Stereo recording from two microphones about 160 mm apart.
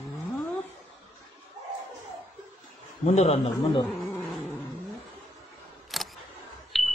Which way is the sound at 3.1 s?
40° left (ahead or behind).